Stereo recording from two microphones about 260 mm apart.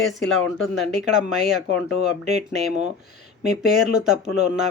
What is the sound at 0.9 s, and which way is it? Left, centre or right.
Speech, right.